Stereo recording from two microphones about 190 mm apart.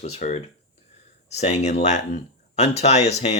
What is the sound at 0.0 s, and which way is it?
Speech, 35° left (ahead or behind).